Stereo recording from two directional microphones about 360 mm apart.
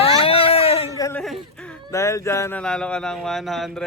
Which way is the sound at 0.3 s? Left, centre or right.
Centre.